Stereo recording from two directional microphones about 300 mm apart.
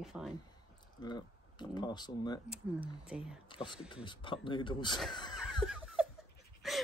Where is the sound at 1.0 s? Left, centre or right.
Centre.